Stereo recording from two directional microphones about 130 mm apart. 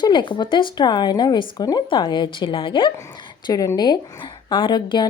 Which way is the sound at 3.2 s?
35° left (ahead or behind).